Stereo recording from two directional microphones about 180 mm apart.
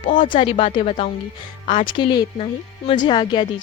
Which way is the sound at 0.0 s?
30° left (ahead or behind).